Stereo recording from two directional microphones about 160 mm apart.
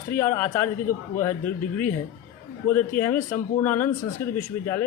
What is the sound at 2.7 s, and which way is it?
A man's voice, 10° left (ahead or behind).